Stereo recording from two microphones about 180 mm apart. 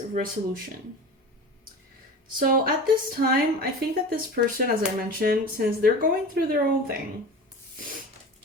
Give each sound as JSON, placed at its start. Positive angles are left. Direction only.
{"t": 0.1, "sound": "speech", "side_deg": -50}
{"t": 2.4, "sound": "speech", "side_deg": -55}